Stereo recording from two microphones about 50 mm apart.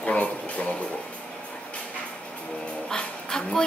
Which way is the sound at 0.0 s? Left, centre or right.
Left.